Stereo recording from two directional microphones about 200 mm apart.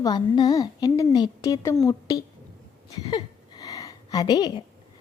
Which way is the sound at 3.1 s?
20° left (ahead or behind).